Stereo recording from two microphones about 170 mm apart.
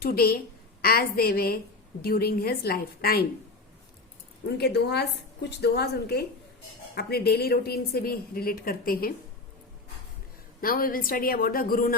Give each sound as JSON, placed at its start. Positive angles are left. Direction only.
{"t": 0.0, "sound": "a woman's voice", "side_deg": 60}
{"t": 4.4, "sound": "a woman's voice", "side_deg": 75}
{"t": 10.6, "sound": "a woman's voice", "side_deg": 60}